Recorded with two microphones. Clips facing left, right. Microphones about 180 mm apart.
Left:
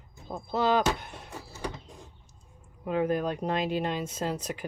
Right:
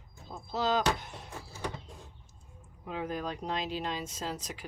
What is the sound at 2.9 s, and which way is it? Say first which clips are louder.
Speech: left 8 dB; 60° left (ahead or behind).